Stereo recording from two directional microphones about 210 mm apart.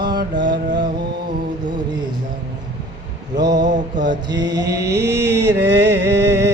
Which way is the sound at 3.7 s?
55° right (ahead or behind).